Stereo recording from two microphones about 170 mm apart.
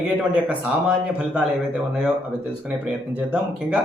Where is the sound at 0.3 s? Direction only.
5° right (ahead or behind).